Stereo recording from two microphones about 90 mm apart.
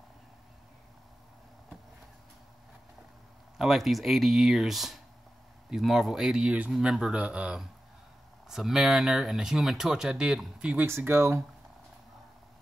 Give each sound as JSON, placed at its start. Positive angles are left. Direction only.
{"t": 3.5, "sound": "speech", "side_deg": 0}
{"t": 10.9, "sound": "speech", "side_deg": -30}